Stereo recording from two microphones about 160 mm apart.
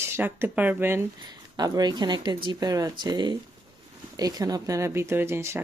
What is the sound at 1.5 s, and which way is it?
Speech, 25° right (ahead or behind).